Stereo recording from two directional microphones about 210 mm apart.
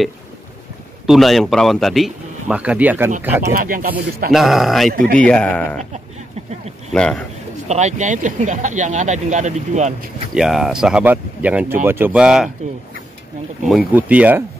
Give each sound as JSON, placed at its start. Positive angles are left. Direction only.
{"t": 1.0, "sound": "speech", "side_deg": 0}
{"t": 3.5, "sound": "speech", "side_deg": -45}
{"t": 4.3, "sound": "speech", "side_deg": 0}
{"t": 6.9, "sound": "speech", "side_deg": 5}
{"t": 7.6, "sound": "speech", "side_deg": -35}
{"t": 10.3, "sound": "speech", "side_deg": 0}
{"t": 13.7, "sound": "speech", "side_deg": -5}